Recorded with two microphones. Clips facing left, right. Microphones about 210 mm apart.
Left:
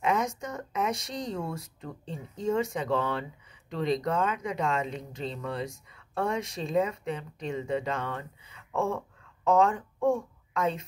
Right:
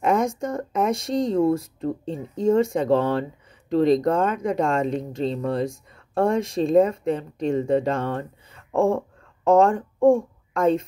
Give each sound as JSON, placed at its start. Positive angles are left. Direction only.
{"t": 0.0, "sound": "a sound", "side_deg": -50}
{"t": 0.4, "sound": "speech", "side_deg": -50}
{"t": 8.7, "sound": "a sound", "side_deg": -30}
{"t": 9.6, "sound": "speech", "side_deg": -45}
{"t": 9.9, "sound": "a child's voice", "side_deg": -25}
{"t": 10.5, "sound": "speech", "side_deg": -50}